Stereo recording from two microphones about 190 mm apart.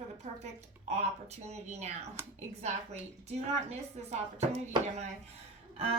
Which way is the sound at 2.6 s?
35° right (ahead or behind).